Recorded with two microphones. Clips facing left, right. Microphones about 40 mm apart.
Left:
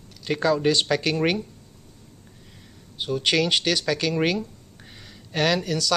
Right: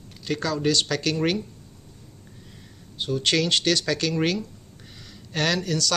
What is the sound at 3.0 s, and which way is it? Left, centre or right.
Speech, centre.